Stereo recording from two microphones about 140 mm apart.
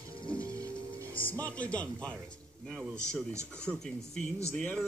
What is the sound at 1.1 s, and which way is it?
A man's voice, 10° left (ahead or behind).